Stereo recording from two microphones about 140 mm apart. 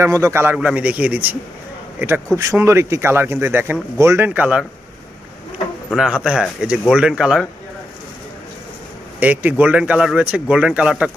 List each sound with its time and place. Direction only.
0.0 s speech: 20° right (ahead or behind)
0.5 s speech: 10° right (ahead or behind)
6.0 s speech: 5° right (ahead or behind)
9.2 s speech: 10° right (ahead or behind)